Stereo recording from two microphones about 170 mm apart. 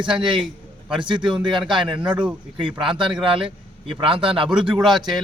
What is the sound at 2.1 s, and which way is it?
Speech, 5° right (ahead or behind).